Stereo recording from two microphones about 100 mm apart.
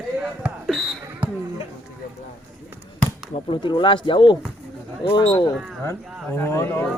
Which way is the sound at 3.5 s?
55° left (ahead or behind).